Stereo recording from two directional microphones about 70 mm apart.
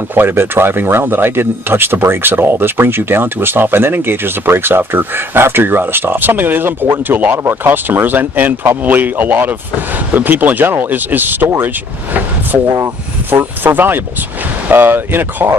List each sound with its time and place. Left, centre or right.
0.1 s speech: right
13.3 s speech: right